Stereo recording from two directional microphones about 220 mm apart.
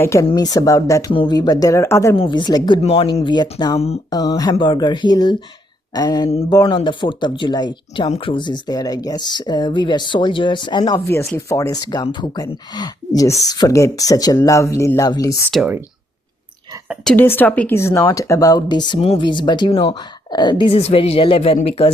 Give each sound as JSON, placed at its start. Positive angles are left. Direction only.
{"t": 0.0, "sound": "speech", "side_deg": 15}
{"t": 4.2, "sound": "speech", "side_deg": 15}
{"t": 15.5, "sound": "speech", "side_deg": -5}
{"t": 16.9, "sound": "speech", "side_deg": 0}